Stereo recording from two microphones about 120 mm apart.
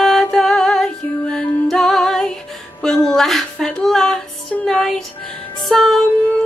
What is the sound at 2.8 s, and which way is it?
Speech, 5° left (ahead or behind).